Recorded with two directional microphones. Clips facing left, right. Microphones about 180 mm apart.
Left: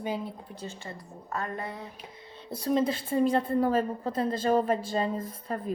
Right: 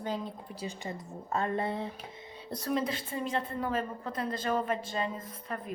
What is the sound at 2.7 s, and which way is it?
A woman's voice, 30° left (ahead or behind).